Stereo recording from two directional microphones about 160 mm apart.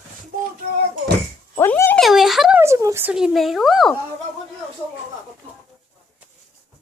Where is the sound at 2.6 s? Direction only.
20° right (ahead or behind).